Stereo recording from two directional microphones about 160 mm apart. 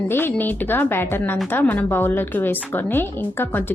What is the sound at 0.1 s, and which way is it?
A woman's voice, 15° left (ahead or behind).